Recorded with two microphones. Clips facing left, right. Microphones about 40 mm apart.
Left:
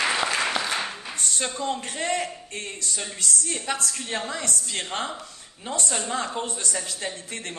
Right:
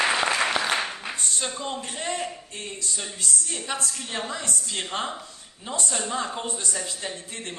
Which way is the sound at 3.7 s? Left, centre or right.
Left.